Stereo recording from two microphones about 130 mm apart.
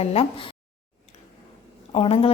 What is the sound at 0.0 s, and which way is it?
Speech, 50° left (ahead or behind).